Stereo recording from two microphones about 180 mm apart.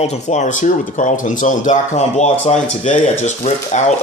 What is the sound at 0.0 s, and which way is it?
Speech, 40° left (ahead or behind).